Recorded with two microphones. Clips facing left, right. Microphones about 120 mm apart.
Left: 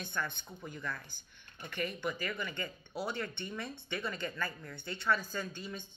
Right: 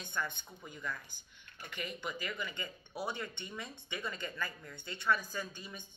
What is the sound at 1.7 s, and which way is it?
Speech, 10° right (ahead or behind).